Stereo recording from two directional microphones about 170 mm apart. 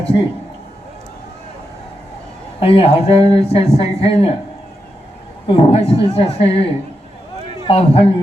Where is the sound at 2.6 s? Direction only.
35° left (ahead or behind).